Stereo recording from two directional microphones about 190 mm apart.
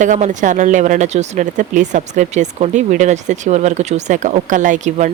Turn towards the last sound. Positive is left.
turn(degrees=-40)  # may be behind; listen again after turning